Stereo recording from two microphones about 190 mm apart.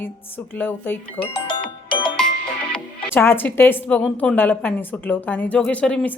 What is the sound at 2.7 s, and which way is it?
Speech, 5° left (ahead or behind).